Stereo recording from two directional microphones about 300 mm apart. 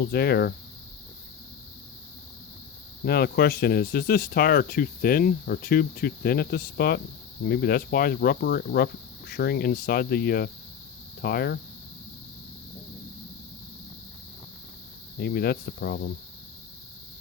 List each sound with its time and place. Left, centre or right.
0.0 s speech: left
3.0 s speech: left
15.2 s speech: left